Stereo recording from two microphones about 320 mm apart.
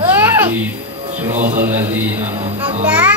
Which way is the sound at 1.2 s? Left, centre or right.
Centre.